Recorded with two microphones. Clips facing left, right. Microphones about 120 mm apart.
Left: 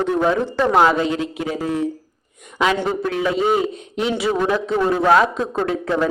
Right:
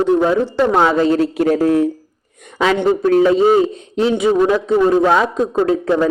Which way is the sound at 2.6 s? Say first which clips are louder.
Right 5 dB; 30° right (ahead or behind).